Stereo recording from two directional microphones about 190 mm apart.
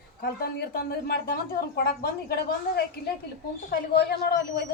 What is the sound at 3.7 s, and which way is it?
Speech, 55° left (ahead or behind).